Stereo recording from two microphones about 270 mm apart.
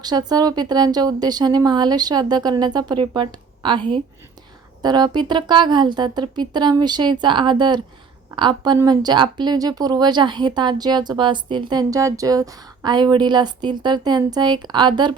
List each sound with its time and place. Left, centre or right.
0.0 s speech: centre